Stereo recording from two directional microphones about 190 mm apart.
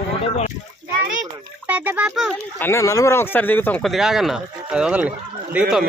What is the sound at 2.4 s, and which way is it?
Speech, 15° left (ahead or behind).